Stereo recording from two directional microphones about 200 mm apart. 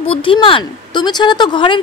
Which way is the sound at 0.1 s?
25° left (ahead or behind).